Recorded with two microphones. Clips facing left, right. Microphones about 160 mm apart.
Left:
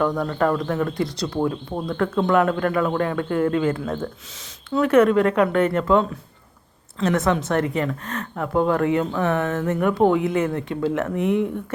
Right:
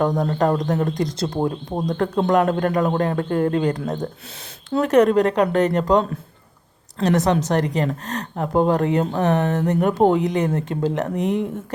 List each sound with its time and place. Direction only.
0.0 s a woman's voice: 40° right (ahead or behind)
1.4 s speech: 25° right (ahead or behind)
1.9 s a woman's voice: 40° right (ahead or behind)